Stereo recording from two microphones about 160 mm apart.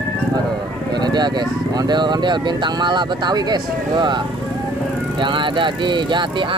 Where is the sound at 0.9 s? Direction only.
25° right (ahead or behind).